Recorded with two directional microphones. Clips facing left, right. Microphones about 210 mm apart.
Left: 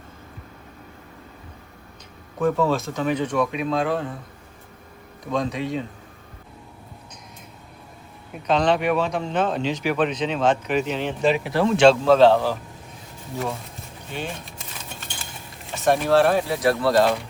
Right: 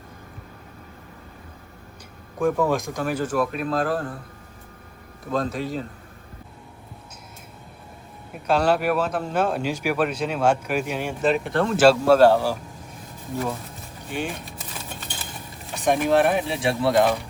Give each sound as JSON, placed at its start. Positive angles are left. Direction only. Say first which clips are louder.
{"t": 2.6, "sound": "speech", "louder": "left 1 dB", "side_deg": -15}
{"t": 5.2, "sound": "speech", "louder": "left 1 dB", "side_deg": 0}
{"t": 8.3, "sound": "speech", "louder": "even", "side_deg": -5}
{"t": 14.1, "sound": "speech", "louder": "right 2 dB", "side_deg": -10}
{"t": 15.7, "sound": "speech", "louder": "left 1 dB", "side_deg": -15}